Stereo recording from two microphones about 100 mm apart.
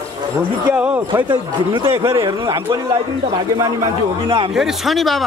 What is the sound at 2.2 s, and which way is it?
Speech, 40° right (ahead or behind).